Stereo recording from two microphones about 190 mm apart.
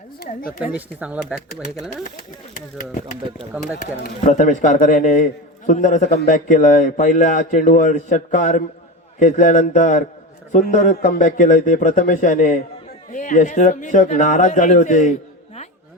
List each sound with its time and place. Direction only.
0.2 s speech: 50° left (ahead or behind)
0.6 s speech: 5° right (ahead or behind)
3.8 s a man's voice: 40° left (ahead or behind)